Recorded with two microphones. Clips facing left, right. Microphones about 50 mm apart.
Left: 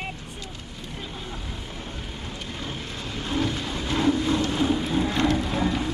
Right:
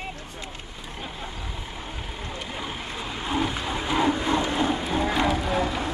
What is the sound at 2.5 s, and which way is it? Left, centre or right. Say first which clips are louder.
Vehicle: even; centre.